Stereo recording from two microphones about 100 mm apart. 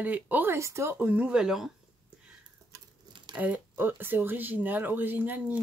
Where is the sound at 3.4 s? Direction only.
20° right (ahead or behind).